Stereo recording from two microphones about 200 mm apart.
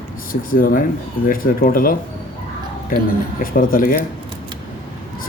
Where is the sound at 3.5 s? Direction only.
45° left (ahead or behind).